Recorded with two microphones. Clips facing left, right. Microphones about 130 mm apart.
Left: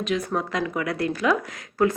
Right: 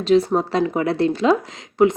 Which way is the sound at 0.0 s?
30° right (ahead or behind).